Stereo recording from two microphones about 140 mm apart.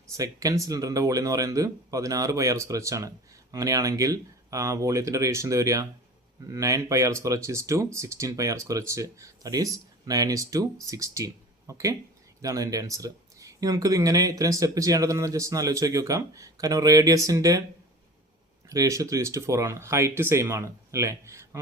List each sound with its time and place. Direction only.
0.2 s speech: 25° right (ahead or behind)
18.7 s speech: 25° right (ahead or behind)